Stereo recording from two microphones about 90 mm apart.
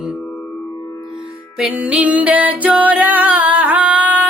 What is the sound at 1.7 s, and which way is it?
Music, 15° right (ahead or behind).